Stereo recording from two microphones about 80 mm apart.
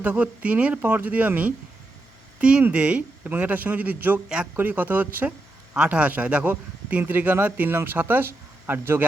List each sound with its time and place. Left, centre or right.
0.0 s speech: centre